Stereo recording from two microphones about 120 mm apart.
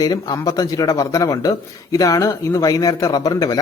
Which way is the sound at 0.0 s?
30° left (ahead or behind).